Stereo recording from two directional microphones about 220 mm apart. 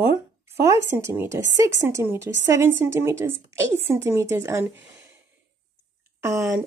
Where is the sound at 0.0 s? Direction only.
10° right (ahead or behind).